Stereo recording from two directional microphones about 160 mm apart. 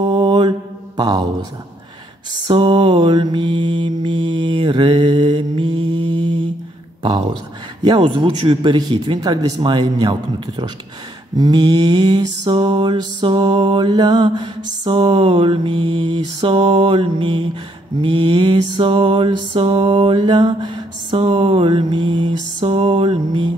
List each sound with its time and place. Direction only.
0.0 s mantra: 25° right (ahead or behind)
2.4 s mantra: 30° right (ahead or behind)
7.8 s speech: 30° right (ahead or behind)
11.3 s mantra: 25° right (ahead or behind)